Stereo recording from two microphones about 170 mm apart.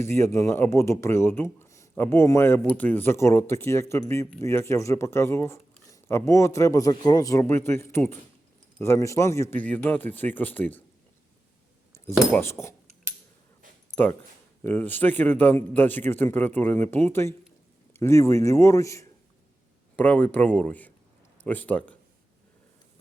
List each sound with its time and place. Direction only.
0.0 s speech: 15° left (ahead or behind)
13.9 s speech: 10° left (ahead or behind)